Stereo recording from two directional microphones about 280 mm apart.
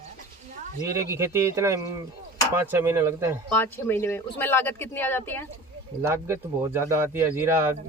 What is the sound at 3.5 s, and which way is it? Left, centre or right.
Speech, centre.